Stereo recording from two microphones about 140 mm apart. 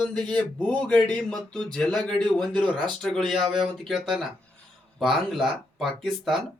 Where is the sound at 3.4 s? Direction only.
35° right (ahead or behind).